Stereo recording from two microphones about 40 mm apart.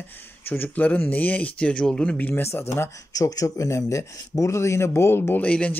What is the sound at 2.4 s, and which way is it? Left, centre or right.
Speech, left.